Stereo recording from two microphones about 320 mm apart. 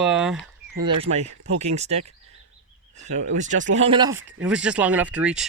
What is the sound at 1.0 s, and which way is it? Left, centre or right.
Speech, right.